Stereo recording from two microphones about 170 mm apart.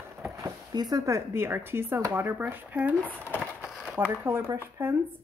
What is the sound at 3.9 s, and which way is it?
Speech, 15° right (ahead or behind).